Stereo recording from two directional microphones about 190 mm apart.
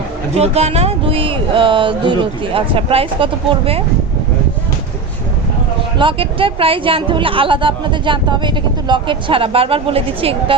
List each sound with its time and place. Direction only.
0.3 s speech: 35° right (ahead or behind)
6.0 s speech: 25° right (ahead or behind)